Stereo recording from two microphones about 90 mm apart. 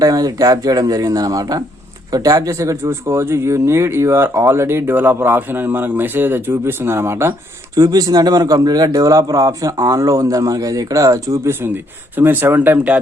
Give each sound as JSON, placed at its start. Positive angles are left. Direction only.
{"t": 0.0, "sound": "speech", "side_deg": -45}
{"t": 7.8, "sound": "a man's voice", "side_deg": -45}